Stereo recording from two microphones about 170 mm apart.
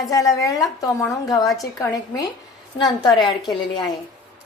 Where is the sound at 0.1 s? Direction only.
20° left (ahead or behind).